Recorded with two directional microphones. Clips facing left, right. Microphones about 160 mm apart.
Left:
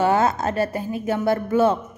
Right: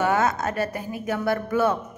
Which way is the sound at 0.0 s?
30° left (ahead or behind).